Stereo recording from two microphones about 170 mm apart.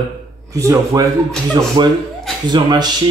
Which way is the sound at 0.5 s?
20° right (ahead or behind).